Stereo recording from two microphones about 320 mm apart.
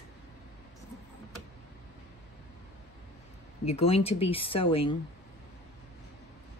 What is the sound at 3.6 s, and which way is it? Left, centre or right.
Speech, centre.